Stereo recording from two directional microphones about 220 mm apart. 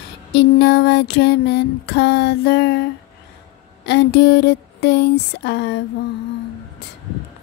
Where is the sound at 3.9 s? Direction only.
50° left (ahead or behind).